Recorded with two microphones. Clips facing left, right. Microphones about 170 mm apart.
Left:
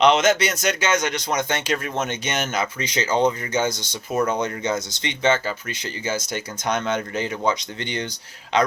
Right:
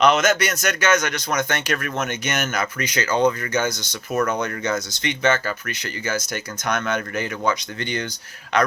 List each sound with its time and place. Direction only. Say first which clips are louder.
0.0 s speech: left 1 dB; 25° left (ahead or behind)